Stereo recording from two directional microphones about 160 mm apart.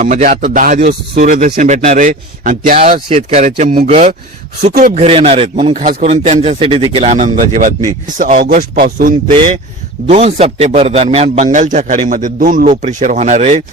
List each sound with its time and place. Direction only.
0.0 s speech: 50° right (ahead or behind)
1.1 s speech: 50° right (ahead or behind)
3.1 s a man's voice: 40° right (ahead or behind); by 3.8 s 55° right (ahead or behind)
3.8 s a man's voice: 45° right (ahead or behind)
5.7 s a man's voice: 50° right (ahead or behind); by 9.1 s 70° right (ahead or behind)
10.1 s a man's voice: 40° right (ahead or behind)